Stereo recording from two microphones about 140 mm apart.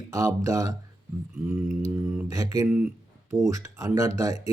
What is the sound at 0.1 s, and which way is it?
Speech, 25° right (ahead or behind).